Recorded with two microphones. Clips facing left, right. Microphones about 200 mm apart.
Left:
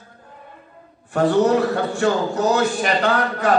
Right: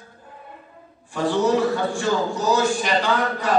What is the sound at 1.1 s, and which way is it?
A man's voice, 60° left (ahead or behind).